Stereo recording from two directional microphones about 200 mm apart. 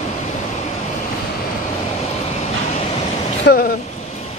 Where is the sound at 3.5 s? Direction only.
60° left (ahead or behind).